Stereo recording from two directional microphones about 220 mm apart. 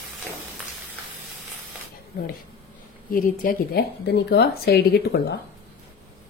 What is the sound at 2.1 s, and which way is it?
A woman's voice, 45° left (ahead or behind).